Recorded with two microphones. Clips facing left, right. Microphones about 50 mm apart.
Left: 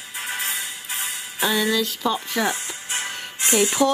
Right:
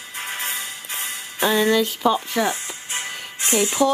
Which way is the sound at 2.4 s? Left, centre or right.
Centre.